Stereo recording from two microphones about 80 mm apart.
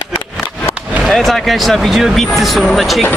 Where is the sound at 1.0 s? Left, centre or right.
Centre.